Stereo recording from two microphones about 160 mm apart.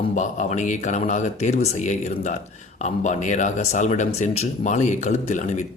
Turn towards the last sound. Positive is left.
turn(degrees=45)  # may be behind; listen again after turning